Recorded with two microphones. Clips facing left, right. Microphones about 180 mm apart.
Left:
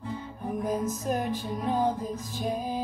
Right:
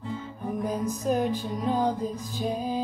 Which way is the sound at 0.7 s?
Centre (ahead or behind).